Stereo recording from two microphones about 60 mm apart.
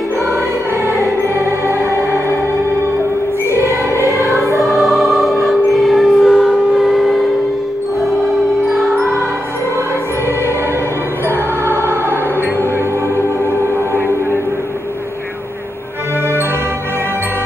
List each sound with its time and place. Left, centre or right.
0.8 s music: right
3.4 s music: right
4.6 s choir: centre
8.7 s music: centre
11.2 s music: right